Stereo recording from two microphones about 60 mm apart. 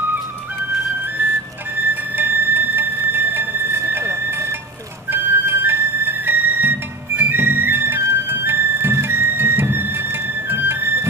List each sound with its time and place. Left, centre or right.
1.8 s music: right